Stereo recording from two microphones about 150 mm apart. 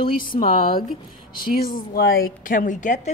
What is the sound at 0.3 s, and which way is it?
Speech, 55° left (ahead or behind).